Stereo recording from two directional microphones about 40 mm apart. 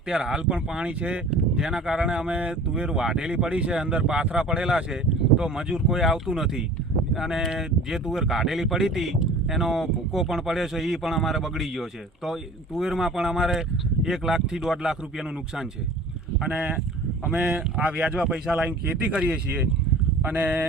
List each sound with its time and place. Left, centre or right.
0.1 s speech: centre
17.8 s speech: right
20.2 s speech: right